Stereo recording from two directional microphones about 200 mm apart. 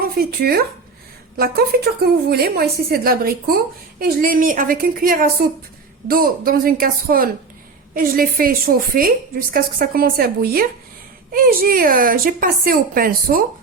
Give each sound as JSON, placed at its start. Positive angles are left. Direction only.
{"t": 0.0, "sound": "a woman's voice", "side_deg": -50}